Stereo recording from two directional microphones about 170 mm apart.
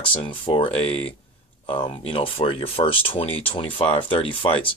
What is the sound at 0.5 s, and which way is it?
Speech, 30° left (ahead or behind).